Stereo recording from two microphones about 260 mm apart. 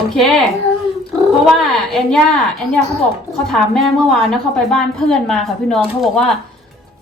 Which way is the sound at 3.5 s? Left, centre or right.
Centre.